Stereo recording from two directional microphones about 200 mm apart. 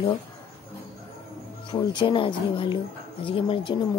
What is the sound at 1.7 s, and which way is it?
Speech, 25° left (ahead or behind).